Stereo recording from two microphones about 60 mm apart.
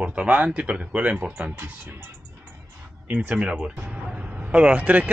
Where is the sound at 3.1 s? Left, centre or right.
Right.